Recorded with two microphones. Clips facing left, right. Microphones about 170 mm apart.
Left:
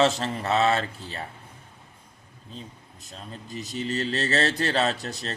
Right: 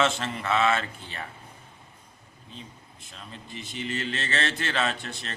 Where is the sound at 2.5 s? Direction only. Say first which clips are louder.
Left 3 dB; 40° left (ahead or behind).